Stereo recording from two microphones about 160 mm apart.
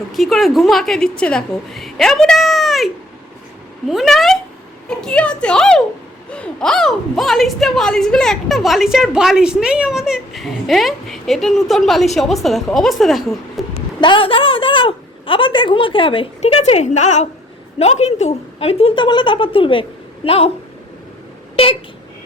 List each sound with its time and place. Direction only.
0.1 s a woman's voice: centre (ahead or behind)
14.0 s a woman's voice: 30° left (ahead or behind)
21.5 s a sound: 35° left (ahead or behind)